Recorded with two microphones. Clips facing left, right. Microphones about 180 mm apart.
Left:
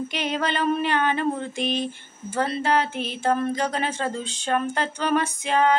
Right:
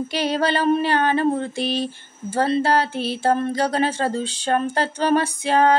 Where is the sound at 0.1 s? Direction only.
35° right (ahead or behind).